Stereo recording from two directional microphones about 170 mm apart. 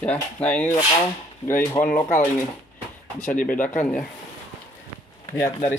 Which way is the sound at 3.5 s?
10° left (ahead or behind).